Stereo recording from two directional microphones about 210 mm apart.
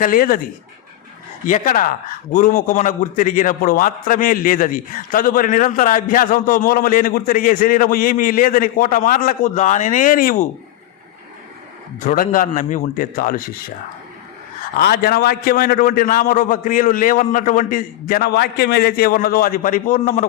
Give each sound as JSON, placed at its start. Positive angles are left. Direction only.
{"t": 0.0, "sound": "a man's voice", "side_deg": 40}
{"t": 1.5, "sound": "a man's voice", "side_deg": 40}
{"t": 11.9, "sound": "a man's voice", "side_deg": 40}
{"t": 14.8, "sound": "a man's voice", "side_deg": 45}